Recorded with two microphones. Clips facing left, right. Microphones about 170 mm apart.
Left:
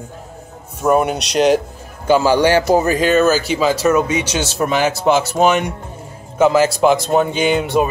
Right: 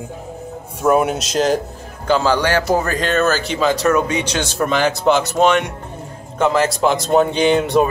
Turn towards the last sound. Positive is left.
turn(degrees=0)  # may be behind; listen again after turning